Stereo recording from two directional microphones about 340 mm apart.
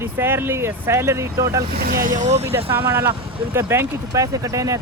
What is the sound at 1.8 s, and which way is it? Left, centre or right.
Speech, right.